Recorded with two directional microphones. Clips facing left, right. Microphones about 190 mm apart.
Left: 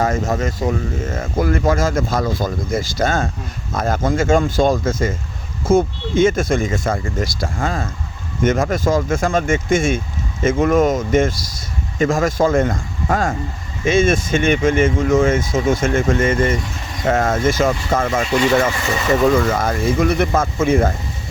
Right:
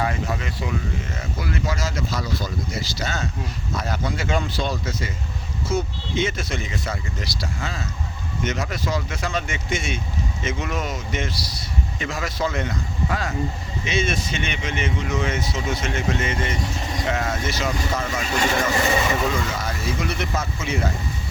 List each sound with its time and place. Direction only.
0.0 s speech: 45° left (ahead or behind)
19.5 s speech: 50° left (ahead or behind)